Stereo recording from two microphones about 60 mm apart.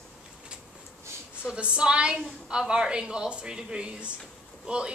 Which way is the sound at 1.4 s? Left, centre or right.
Centre.